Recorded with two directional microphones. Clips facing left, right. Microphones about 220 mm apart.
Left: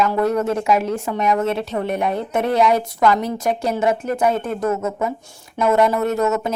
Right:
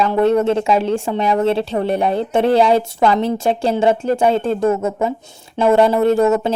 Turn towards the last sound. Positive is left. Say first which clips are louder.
# right 6 dB
turn(degrees=-30)  # may be behind; listen again after turning